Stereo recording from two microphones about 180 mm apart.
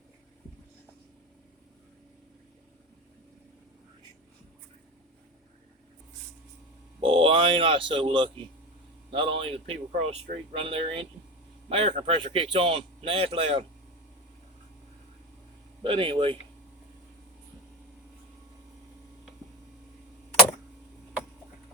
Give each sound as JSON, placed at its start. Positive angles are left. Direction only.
{"t": 7.0, "sound": "speech", "side_deg": -30}
{"t": 15.8, "sound": "speech", "side_deg": -30}